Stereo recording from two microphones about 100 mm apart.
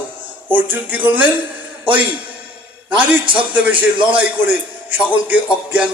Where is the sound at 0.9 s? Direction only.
15° right (ahead or behind).